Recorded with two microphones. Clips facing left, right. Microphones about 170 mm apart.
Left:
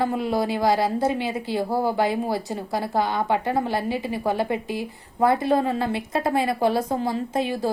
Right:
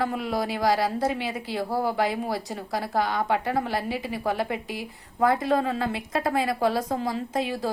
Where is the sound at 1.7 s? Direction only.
25° left (ahead or behind).